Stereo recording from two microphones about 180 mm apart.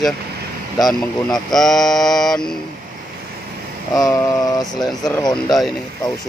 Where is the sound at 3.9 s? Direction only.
20° left (ahead or behind).